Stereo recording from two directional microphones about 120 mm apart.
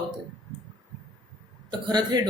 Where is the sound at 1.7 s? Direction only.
35° right (ahead or behind).